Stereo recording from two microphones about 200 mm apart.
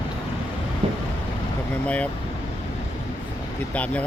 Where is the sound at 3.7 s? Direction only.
5° left (ahead or behind).